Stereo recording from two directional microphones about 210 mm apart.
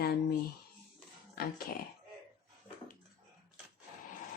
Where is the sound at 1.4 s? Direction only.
45° left (ahead or behind).